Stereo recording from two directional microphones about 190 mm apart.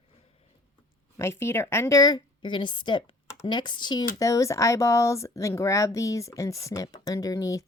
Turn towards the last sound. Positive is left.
turn(degrees=15)  # may be behind; listen again after turning